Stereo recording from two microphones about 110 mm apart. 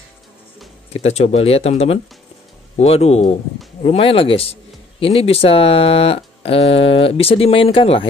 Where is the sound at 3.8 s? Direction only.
60° left (ahead or behind).